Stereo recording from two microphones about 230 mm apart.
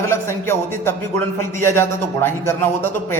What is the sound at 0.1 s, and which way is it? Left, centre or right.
A man's voice, centre.